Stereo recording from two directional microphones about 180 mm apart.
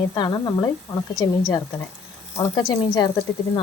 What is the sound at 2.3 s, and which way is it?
Speech, 20° left (ahead or behind).